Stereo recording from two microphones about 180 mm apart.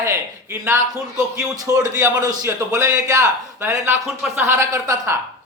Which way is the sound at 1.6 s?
15° right (ahead or behind).